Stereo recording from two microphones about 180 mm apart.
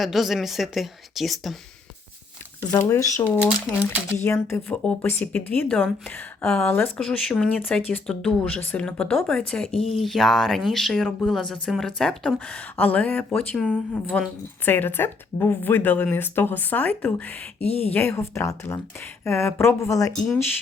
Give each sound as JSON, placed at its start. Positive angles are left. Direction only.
{"t": 0.0, "sound": "a woman's voice", "side_deg": 0}
{"t": 2.6, "sound": "a woman's voice", "side_deg": 15}
{"t": 20.2, "sound": "a woman's voice", "side_deg": 5}